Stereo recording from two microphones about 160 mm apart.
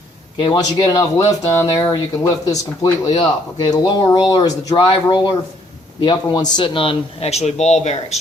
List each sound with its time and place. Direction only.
0.3 s speech: 30° left (ahead or behind); by 8.2 s 45° left (ahead or behind)